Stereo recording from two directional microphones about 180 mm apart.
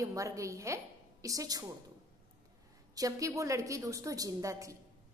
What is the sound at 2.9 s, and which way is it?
A woman's voice, 20° right (ahead or behind).